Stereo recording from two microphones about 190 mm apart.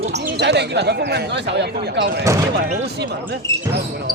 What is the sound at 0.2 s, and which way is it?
Speech, 60° right (ahead or behind).